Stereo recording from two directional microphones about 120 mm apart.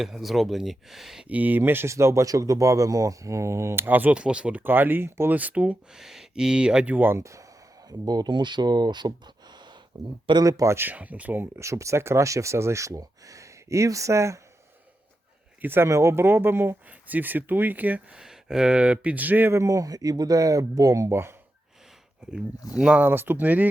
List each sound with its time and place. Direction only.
0.0 s speech: centre (ahead or behind); by 14.4 s 25° right (ahead or behind)
15.6 s speech: 20° right (ahead or behind)
22.3 s speech: 5° right (ahead or behind)